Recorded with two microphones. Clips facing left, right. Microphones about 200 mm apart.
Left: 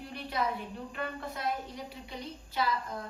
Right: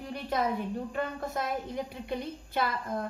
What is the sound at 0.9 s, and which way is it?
A woman's voice, 45° right (ahead or behind).